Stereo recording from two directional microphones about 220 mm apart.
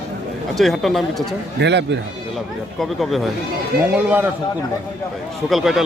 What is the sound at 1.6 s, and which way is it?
Speech, 50° right (ahead or behind).